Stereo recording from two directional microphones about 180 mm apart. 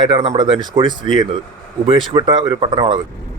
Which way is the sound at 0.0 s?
30° right (ahead or behind).